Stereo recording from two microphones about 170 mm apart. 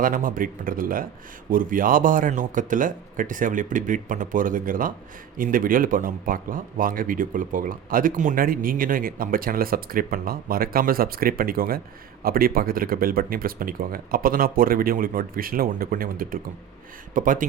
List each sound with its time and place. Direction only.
0.0 s speech: 55° right (ahead or behind)